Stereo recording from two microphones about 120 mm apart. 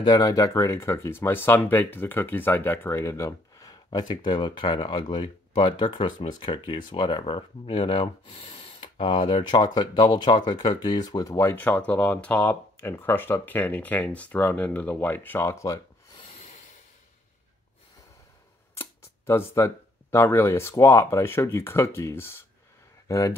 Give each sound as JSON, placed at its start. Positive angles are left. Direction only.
{"t": 0.0, "sound": "speech", "side_deg": 30}
{"t": 16.3, "sound": "a sound", "side_deg": 65}
{"t": 18.8, "sound": "speech", "side_deg": 20}